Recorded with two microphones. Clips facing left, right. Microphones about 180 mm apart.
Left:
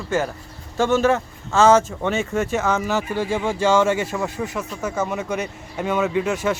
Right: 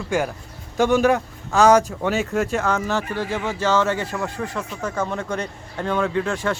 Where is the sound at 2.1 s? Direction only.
Centre (ahead or behind).